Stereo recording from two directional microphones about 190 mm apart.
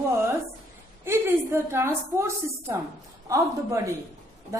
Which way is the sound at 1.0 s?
10° right (ahead or behind).